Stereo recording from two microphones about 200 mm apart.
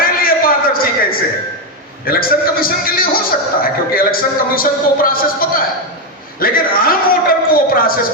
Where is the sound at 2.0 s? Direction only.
45° left (ahead or behind).